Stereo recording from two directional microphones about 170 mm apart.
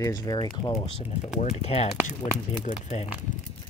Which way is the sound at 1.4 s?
40° left (ahead or behind).